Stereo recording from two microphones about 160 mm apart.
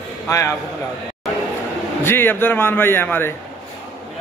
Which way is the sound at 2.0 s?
15° left (ahead or behind).